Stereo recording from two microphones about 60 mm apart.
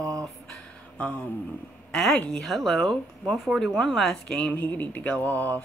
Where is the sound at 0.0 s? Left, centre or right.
Right.